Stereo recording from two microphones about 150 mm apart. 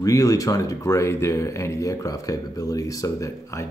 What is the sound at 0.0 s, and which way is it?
Speech, 20° left (ahead or behind).